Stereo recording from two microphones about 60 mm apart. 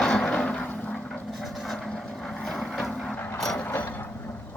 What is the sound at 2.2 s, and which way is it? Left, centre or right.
Vehicle, centre.